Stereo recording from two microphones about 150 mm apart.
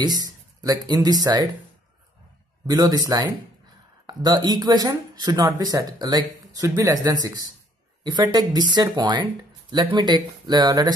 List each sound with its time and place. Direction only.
0.0 s speech: 25° right (ahead or behind)
2.6 s speech: 25° right (ahead or behind)